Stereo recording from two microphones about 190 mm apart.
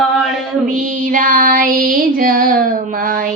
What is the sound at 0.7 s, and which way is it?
Female singing, 45° right (ahead or behind).